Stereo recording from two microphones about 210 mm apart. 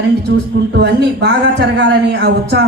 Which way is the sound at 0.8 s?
55° right (ahead or behind).